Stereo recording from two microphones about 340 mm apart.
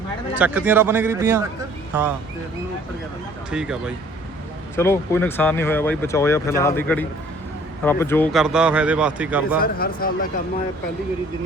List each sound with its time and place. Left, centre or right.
0.3 s speech: centre
3.5 s speech: centre
9.6 s speech: left